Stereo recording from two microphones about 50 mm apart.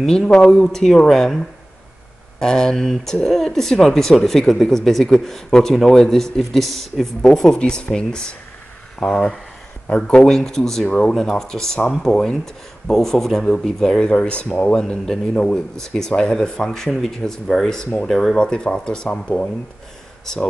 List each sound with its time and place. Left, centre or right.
0.0 s speech: centre
18.4 s speech: centre